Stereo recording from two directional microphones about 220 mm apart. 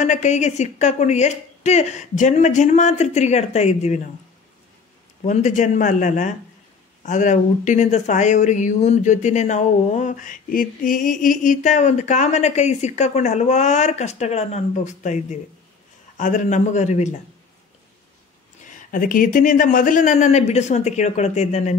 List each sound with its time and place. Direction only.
0.0 s speech: 35° left (ahead or behind)
5.2 s speech: 35° left (ahead or behind)
18.7 s speech: 40° left (ahead or behind)